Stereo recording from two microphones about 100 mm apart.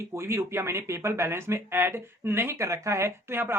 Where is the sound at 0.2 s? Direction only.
25° right (ahead or behind).